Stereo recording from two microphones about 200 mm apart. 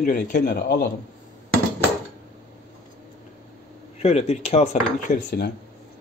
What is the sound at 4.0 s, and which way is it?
Speech, 30° left (ahead or behind).